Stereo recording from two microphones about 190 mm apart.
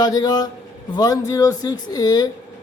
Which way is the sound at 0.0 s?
20° left (ahead or behind).